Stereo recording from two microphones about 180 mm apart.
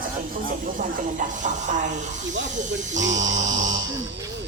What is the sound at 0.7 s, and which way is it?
Speech, 45° right (ahead or behind).